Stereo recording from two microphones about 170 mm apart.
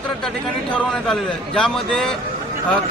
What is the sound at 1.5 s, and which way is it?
Speech, centre (ahead or behind).